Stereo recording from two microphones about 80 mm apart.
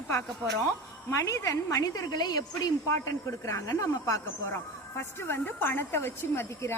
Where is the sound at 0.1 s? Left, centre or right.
Left.